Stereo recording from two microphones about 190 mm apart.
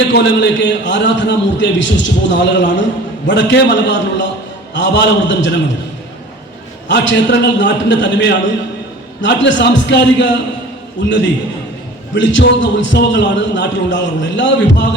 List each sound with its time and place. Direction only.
0.0 s a man's voice: 65° left (ahead or behind)
6.8 s a man's voice: 70° left (ahead or behind)
12.1 s a man's voice: 70° left (ahead or behind)